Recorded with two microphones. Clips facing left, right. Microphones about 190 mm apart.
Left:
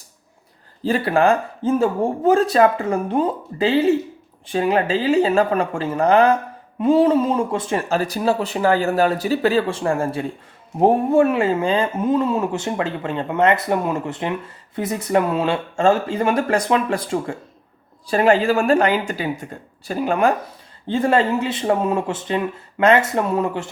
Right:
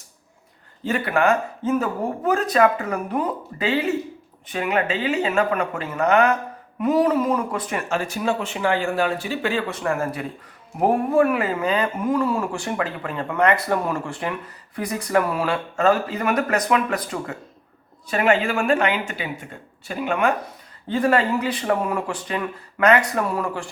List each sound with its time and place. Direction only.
0.8 s speech: 35° left (ahead or behind)
20.8 s speech: 25° left (ahead or behind)